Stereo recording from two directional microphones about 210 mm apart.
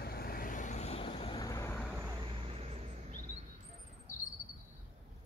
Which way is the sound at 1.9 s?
15° right (ahead or behind).